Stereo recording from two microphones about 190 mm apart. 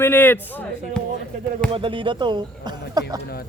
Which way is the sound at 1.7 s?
25° right (ahead or behind).